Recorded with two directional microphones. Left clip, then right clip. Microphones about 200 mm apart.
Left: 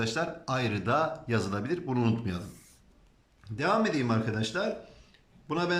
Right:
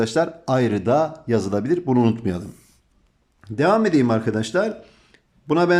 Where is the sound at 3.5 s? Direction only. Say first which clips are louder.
Right 9 dB; 40° right (ahead or behind).